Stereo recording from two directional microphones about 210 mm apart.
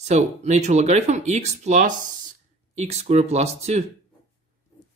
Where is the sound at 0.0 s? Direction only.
35° right (ahead or behind).